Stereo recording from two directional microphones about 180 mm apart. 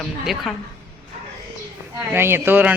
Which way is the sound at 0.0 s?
Centre (ahead or behind).